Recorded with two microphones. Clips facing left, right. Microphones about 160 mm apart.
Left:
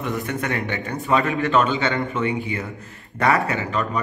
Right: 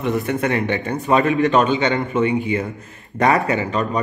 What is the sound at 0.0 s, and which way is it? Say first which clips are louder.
A man's voice: right 6 dB; 20° right (ahead or behind).